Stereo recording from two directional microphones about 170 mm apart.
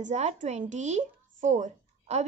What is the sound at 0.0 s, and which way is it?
Speech, 40° right (ahead or behind).